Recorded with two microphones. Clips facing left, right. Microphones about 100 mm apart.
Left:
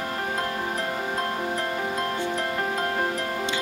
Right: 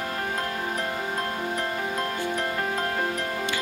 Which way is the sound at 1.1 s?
10° left (ahead or behind).